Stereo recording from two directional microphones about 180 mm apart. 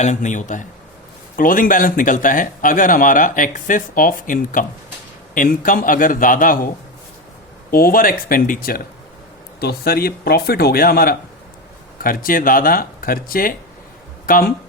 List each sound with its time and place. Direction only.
0.0 s speech: 40° left (ahead or behind)
7.7 s speech: 55° left (ahead or behind)